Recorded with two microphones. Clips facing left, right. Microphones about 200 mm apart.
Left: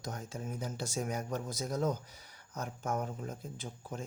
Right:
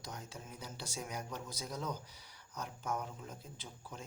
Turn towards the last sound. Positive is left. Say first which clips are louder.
# left 7 dB
turn(degrees=50)  # may be behind; listen again after turning